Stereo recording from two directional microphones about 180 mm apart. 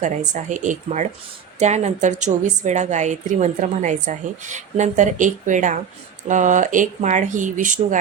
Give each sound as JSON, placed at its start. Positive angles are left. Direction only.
{"t": 0.0, "sound": "a woman's voice", "side_deg": -45}